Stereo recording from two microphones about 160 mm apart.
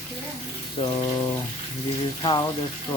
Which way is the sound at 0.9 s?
25° left (ahead or behind).